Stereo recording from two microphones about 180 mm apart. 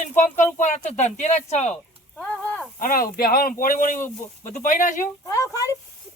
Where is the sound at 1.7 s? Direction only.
5° left (ahead or behind).